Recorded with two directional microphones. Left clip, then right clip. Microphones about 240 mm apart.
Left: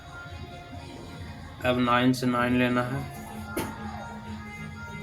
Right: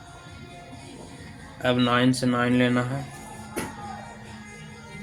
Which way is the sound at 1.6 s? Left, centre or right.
Right.